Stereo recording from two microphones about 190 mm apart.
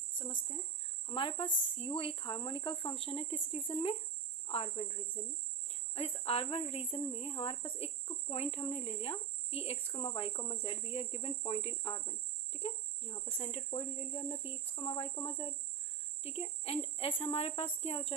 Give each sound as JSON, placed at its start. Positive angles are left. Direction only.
{"t": 1.0, "sound": "speech", "side_deg": 30}
{"t": 3.1, "sound": "cricket", "side_deg": 30}
{"t": 5.9, "sound": "cricket", "side_deg": 30}
{"t": 16.2, "sound": "speech", "side_deg": 30}
{"t": 17.2, "sound": "cricket", "side_deg": 35}